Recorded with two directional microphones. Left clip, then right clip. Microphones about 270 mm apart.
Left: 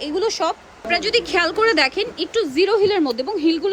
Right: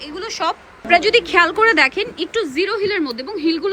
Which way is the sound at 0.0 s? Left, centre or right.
Centre.